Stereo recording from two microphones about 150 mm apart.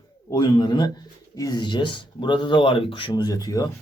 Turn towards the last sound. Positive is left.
turn(degrees=25)  # may be behind; listen again after turning